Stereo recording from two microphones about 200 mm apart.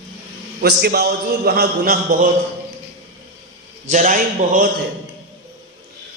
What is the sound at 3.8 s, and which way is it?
Speech, 40° right (ahead or behind).